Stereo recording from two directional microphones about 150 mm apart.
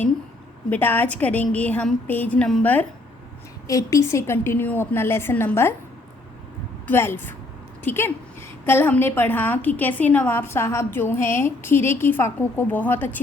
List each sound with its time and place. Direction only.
0.7 s a woman's voice: 15° left (ahead or behind)
3.7 s a woman's voice: 20° left (ahead or behind)
6.8 s a woman's voice: 15° left (ahead or behind)